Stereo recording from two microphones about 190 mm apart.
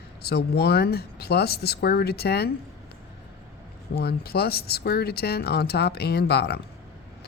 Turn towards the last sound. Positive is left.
turn(degrees=60)  # may be behind; listen again after turning